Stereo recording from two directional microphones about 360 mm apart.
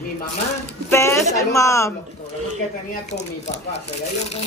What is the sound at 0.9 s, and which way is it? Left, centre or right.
Speech, centre.